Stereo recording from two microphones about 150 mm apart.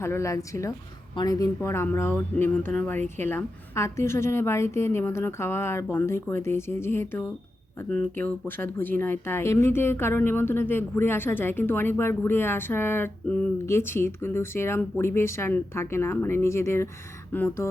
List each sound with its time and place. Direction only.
0.0 s speech: 20° left (ahead or behind)